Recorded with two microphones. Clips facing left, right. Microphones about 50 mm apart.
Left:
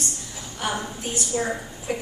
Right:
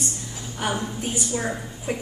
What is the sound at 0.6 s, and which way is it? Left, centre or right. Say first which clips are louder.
A woman's voice: right 1 dB; centre.